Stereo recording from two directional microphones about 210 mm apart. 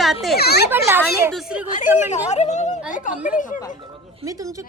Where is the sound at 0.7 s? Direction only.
10° right (ahead or behind).